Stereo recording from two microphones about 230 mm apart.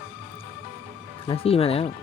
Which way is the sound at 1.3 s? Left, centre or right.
Left.